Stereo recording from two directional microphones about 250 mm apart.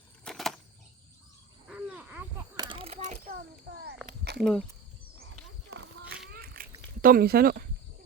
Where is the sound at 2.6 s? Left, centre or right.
Right.